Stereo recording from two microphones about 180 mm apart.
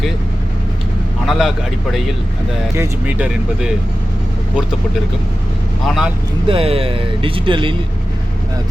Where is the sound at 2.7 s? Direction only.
10° right (ahead or behind).